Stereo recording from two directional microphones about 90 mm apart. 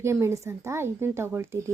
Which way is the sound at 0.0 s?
30° right (ahead or behind).